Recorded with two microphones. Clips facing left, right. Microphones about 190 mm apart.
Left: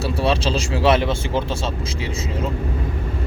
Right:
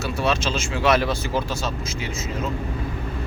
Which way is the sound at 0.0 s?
30° left (ahead or behind).